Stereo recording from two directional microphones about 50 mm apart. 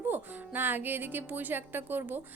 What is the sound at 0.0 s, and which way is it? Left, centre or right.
Speech, right.